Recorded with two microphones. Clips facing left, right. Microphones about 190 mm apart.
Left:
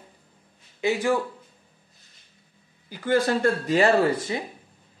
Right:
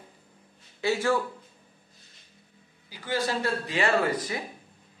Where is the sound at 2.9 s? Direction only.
50° left (ahead or behind); by 4.4 s 25° left (ahead or behind).